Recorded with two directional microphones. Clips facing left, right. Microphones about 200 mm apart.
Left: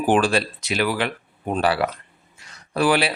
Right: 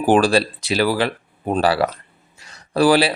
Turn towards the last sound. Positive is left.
turn(degrees=-35)  # may be behind; listen again after turning